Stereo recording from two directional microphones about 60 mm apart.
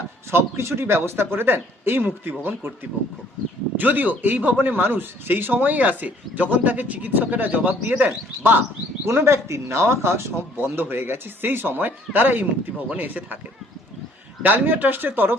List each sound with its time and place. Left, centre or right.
0.3 s speech: right
3.8 s a man's voice: right
9.0 s a man's voice: right
14.4 s speech: right